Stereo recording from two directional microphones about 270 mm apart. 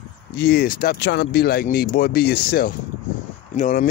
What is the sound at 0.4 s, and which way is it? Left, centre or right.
Speech, left.